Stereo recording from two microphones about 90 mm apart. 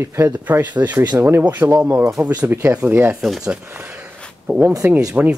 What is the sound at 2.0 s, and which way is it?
Speech, 35° right (ahead or behind).